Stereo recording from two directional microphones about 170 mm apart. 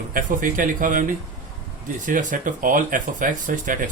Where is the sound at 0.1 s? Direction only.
55° right (ahead or behind).